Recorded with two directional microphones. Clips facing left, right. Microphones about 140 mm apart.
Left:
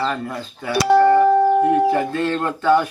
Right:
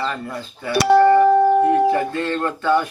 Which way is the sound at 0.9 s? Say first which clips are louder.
Right 1 dB; 85° right.